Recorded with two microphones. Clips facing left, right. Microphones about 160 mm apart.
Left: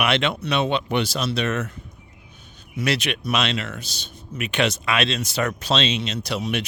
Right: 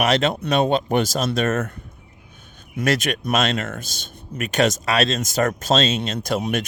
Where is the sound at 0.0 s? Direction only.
40° right (ahead or behind).